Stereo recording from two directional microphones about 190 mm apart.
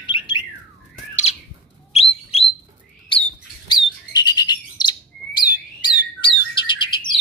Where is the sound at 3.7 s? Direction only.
20° left (ahead or behind).